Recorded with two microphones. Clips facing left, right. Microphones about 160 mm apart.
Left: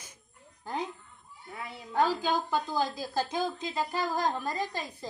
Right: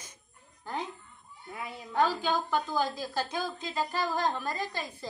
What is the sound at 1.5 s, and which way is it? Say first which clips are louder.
Speech: right 1 dB; 10° right (ahead or behind).